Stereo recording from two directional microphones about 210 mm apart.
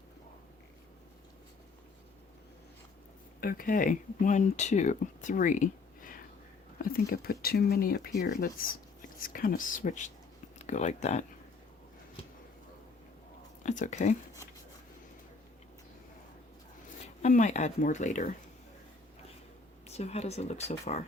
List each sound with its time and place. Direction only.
3.4 s speech: 40° left (ahead or behind)
13.6 s speech: 35° left (ahead or behind)
17.0 s speech: 35° left (ahead or behind)
19.9 s speech: 30° left (ahead or behind)